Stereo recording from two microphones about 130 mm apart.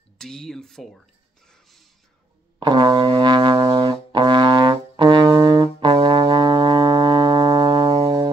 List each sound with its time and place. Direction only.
0.2 s speech: 5° left (ahead or behind)
1.5 s a sound: centre (ahead or behind)
2.6 s music: 35° right (ahead or behind)